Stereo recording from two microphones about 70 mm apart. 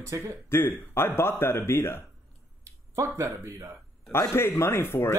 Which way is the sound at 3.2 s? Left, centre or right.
Right.